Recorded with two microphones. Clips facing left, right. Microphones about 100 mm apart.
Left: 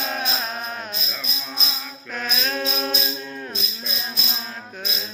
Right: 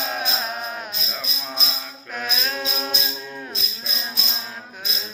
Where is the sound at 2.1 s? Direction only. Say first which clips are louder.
Left 1 dB; 10° right (ahead or behind).